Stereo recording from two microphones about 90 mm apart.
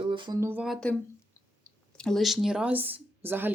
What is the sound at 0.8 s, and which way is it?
Speech, 10° left (ahead or behind).